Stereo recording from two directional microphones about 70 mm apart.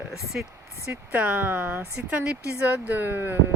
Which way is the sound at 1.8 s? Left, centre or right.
Centre.